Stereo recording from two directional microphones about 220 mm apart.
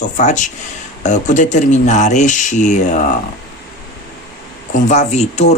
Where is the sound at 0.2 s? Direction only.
35° left (ahead or behind).